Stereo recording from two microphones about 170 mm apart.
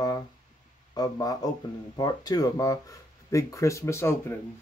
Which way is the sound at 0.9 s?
20° left (ahead or behind).